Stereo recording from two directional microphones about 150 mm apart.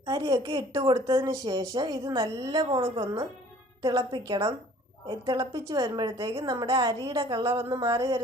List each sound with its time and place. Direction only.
0.0 s a woman's voice: 25° right (ahead or behind)